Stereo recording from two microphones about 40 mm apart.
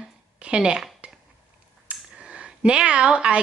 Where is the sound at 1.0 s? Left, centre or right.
Right.